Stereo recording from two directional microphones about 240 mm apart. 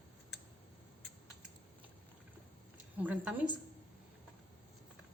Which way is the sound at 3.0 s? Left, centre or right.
Centre.